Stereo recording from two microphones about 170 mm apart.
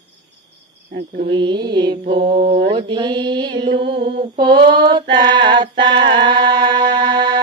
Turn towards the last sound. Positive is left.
turn(degrees=-30)  # may be behind; listen again after turning